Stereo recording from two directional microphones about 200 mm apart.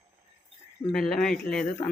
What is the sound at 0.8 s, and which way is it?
Speech, centre (ahead or behind).